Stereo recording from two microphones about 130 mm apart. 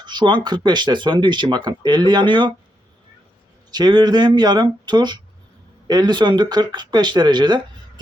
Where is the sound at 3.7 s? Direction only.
35° right (ahead or behind).